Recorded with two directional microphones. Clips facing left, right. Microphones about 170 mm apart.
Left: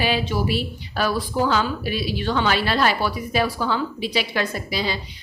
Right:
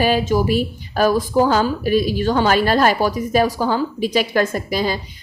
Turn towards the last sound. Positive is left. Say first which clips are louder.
# right 5 dB
turn(degrees=-45)  # may be behind; listen again after turning